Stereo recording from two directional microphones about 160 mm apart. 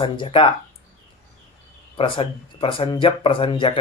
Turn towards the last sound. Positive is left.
turn(degrees=35)  # may be behind; listen again after turning